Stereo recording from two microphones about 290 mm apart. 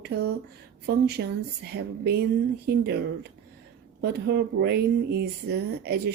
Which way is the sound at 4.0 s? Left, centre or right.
Right.